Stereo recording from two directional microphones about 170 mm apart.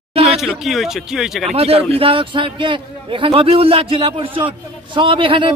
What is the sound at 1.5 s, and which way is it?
A man's voice, 35° right (ahead or behind).